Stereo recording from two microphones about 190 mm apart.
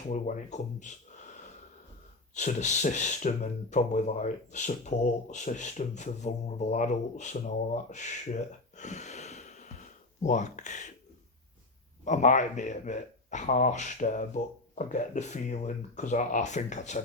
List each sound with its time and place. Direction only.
0.1 s speech: 40° left (ahead or behind)
2.3 s speech: 40° left (ahead or behind)
12.0 s speech: 40° left (ahead or behind)